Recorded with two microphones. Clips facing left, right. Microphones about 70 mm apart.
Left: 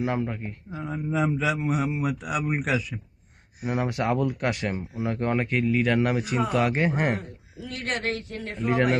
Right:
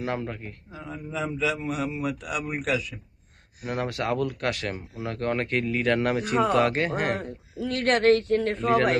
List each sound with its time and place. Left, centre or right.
0.0 s speech: centre
1.1 s a man's voice: left
1.6 s speech: centre
6.9 s a man's voice: left
7.7 s speech: right
8.6 s speech: centre